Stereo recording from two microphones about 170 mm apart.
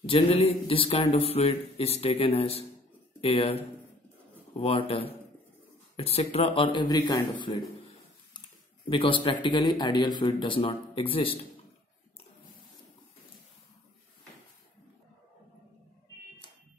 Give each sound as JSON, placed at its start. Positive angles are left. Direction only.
{"t": 0.0, "sound": "speech", "side_deg": 35}
{"t": 4.6, "sound": "speech", "side_deg": 35}
{"t": 8.8, "sound": "speech", "side_deg": 30}